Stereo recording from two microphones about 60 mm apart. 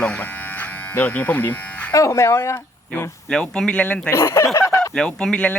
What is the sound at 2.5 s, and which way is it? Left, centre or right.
Speech, left.